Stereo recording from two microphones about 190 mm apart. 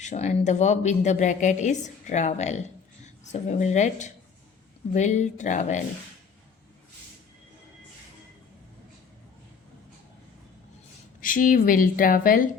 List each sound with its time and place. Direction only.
0.0 s speech: 35° left (ahead or behind)
11.2 s a woman's voice: 45° left (ahead or behind)